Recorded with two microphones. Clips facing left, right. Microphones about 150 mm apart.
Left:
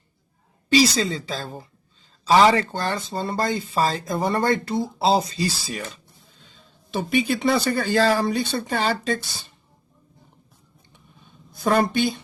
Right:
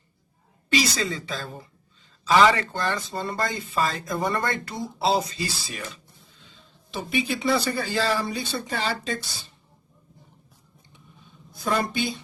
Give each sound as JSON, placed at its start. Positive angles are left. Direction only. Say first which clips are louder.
{"t": 0.7, "sound": "speech", "louder": "left 6 dB", "side_deg": 30}
{"t": 6.4, "sound": "speech", "louder": "left 1 dB", "side_deg": 50}
{"t": 11.6, "sound": "a woman's voice", "louder": "left 6 dB", "side_deg": 55}